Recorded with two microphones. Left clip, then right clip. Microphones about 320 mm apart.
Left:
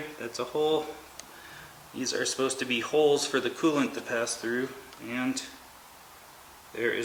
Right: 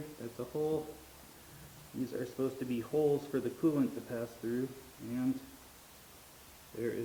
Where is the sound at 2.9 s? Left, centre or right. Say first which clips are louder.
Left 8 dB; left.